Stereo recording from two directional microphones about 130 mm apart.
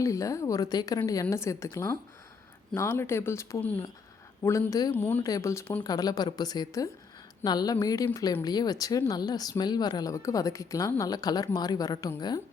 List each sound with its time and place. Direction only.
0.0 s a woman's voice: 25° left (ahead or behind)
5.8 s a woman's voice: 30° left (ahead or behind)